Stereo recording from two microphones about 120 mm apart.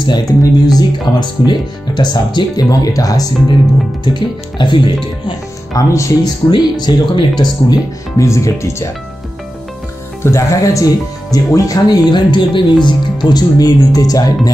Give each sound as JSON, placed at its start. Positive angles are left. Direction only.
{"t": 0.0, "sound": "speech", "side_deg": 35}
{"t": 5.7, "sound": "speech", "side_deg": 30}
{"t": 7.7, "sound": "speech", "side_deg": 25}
{"t": 10.2, "sound": "speech", "side_deg": 25}